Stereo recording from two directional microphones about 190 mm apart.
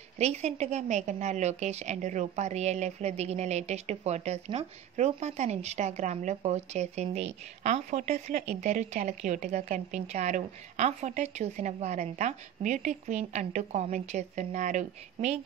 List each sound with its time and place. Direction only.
0.2 s speech: 35° right (ahead or behind)